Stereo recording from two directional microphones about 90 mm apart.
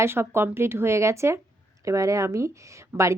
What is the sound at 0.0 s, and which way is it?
A woman's voice, 25° right (ahead or behind).